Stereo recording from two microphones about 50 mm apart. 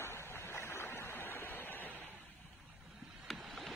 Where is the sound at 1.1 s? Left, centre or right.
Left.